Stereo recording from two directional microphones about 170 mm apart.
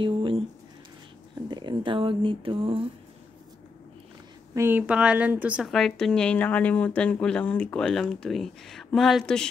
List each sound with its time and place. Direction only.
0.0 s squish: 30° right (ahead or behind)
1.5 s speech: 25° right (ahead or behind)
4.6 s a woman's voice: 10° right (ahead or behind)